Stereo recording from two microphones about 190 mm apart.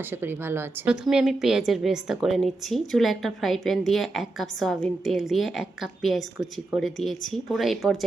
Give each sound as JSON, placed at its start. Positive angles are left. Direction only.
{"t": 0.1, "sound": "a woman's voice", "side_deg": -10}